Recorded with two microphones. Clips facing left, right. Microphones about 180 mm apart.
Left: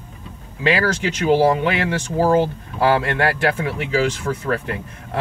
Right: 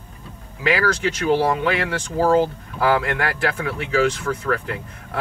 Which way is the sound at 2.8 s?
25° left (ahead or behind).